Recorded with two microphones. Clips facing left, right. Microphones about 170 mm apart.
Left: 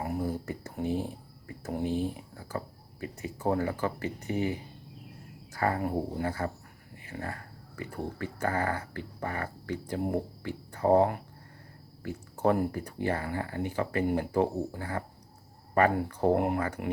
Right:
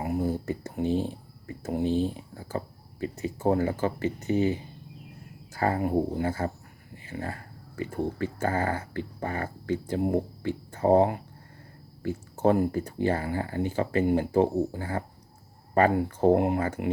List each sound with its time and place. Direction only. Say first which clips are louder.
0.0 s speech: right 4 dB; 20° right (ahead or behind)